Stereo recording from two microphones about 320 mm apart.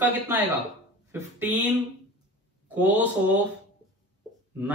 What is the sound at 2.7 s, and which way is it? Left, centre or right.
Speech, centre.